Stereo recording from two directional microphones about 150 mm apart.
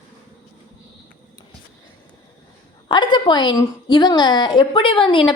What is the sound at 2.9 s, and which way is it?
A woman's voice, 30° left (ahead or behind).